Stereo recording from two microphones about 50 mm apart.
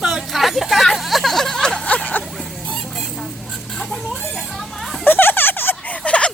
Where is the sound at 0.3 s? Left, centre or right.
Centre.